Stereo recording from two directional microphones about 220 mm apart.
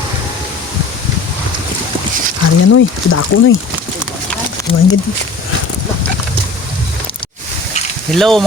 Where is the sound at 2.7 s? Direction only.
70° left (ahead or behind).